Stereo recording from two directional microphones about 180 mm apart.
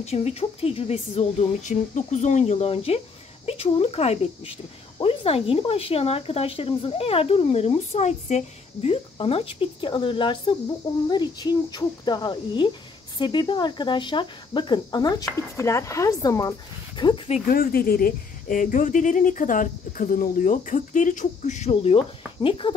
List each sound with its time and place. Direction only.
0.0 s speech: 35° left (ahead or behind)
17.5 s speech: 55° left (ahead or behind); by 22.8 s 30° left (ahead or behind)